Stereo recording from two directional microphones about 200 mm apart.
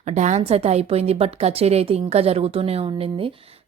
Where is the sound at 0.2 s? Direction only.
35° right (ahead or behind).